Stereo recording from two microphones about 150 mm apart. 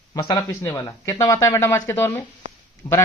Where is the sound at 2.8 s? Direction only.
15° left (ahead or behind).